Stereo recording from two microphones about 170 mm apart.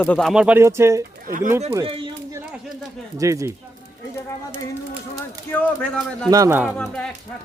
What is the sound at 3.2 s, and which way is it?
Speech, 20° right (ahead or behind).